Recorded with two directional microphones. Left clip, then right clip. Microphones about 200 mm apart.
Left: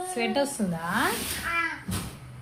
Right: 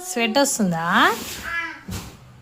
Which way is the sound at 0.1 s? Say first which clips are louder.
Right 8 dB; 40° right (ahead or behind).